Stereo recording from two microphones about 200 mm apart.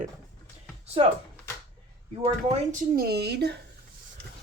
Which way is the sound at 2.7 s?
50° right (ahead or behind).